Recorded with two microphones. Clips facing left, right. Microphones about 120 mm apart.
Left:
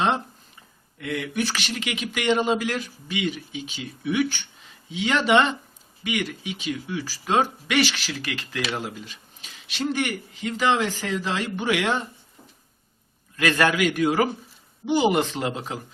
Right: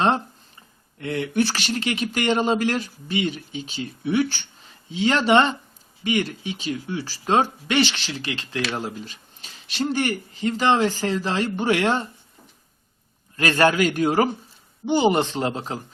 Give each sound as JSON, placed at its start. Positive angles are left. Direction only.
{"t": 1.0, "sound": "speech", "side_deg": -30}
{"t": 13.3, "sound": "speech", "side_deg": -30}